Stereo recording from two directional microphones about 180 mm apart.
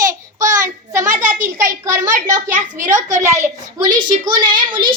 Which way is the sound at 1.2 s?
45° right (ahead or behind).